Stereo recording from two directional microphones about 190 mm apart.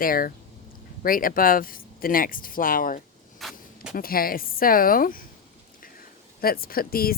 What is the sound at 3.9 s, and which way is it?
Speech, 50° left (ahead or behind).